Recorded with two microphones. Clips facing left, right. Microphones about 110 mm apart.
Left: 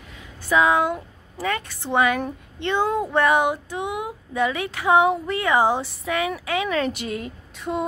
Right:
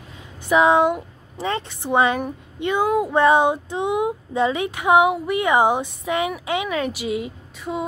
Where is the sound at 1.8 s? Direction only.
25° right (ahead or behind).